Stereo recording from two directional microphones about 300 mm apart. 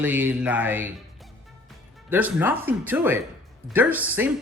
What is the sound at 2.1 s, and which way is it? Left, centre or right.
Speech, centre.